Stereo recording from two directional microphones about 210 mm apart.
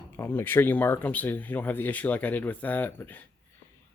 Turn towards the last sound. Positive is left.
turn(degrees=10)  # may be behind; listen again after turning